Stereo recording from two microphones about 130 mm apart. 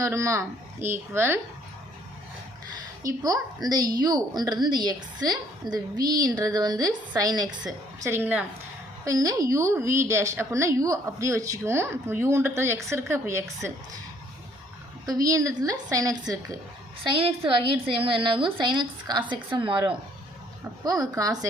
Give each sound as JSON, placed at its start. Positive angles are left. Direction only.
{"t": 0.0, "sound": "a woman's voice", "side_deg": -25}
{"t": 3.0, "sound": "a woman's voice", "side_deg": -25}
{"t": 8.0, "sound": "a woman's voice", "side_deg": -20}
{"t": 9.0, "sound": "a woman's voice", "side_deg": -30}
{"t": 15.0, "sound": "a woman's voice", "side_deg": -30}
{"t": 17.0, "sound": "a woman's voice", "side_deg": -40}